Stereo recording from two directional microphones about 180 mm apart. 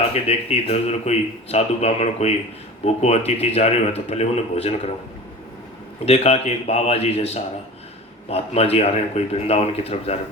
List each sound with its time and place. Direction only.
0.1 s speech: 35° left (ahead or behind)
6.1 s speech: 35° left (ahead or behind)